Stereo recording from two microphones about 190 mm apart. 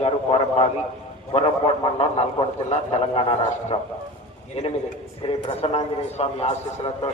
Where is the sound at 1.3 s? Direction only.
30° left (ahead or behind).